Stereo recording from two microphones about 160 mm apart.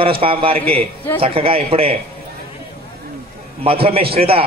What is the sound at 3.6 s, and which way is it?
Speech, 35° right (ahead or behind).